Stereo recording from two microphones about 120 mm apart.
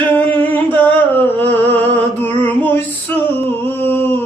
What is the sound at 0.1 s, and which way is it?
Humming, 15° left (ahead or behind).